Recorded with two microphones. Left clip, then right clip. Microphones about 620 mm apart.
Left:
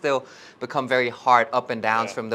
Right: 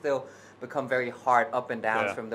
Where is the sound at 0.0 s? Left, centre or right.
Left.